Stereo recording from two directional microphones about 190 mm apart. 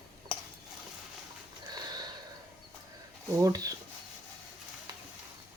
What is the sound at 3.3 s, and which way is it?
Speech, 20° right (ahead or behind).